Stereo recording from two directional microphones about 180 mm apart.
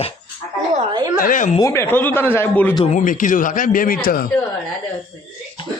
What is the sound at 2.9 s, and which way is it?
Speech, 45° left (ahead or behind).